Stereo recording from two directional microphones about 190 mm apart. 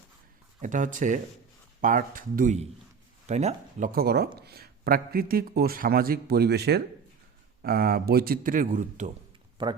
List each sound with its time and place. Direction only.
0.6 s a man's voice: 40° right (ahead or behind)
9.6 s speech: 25° right (ahead or behind)